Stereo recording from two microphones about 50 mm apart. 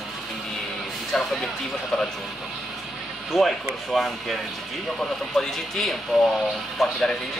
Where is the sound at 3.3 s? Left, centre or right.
Centre.